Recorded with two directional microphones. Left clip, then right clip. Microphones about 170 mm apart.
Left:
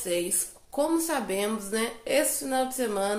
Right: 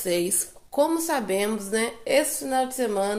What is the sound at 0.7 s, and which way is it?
A woman's voice, 30° right (ahead or behind).